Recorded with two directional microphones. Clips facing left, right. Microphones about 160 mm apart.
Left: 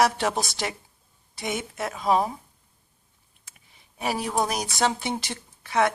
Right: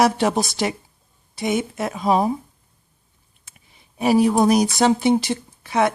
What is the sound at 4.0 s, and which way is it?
Speech, 10° right (ahead or behind).